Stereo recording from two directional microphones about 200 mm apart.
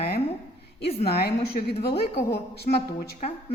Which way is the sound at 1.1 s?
55° left (ahead or behind).